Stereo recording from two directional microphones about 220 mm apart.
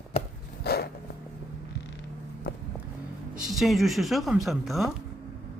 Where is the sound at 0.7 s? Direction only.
45° left (ahead or behind).